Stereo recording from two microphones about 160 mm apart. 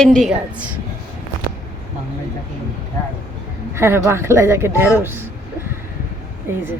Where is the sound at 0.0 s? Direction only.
Centre (ahead or behind).